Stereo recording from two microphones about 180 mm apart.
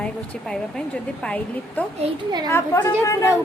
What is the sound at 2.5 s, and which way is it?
Speech, 15° left (ahead or behind).